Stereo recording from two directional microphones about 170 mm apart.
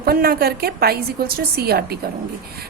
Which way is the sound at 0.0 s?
65° right (ahead or behind).